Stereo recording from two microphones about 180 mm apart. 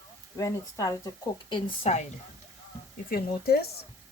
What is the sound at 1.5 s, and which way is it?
Speech, 35° left (ahead or behind).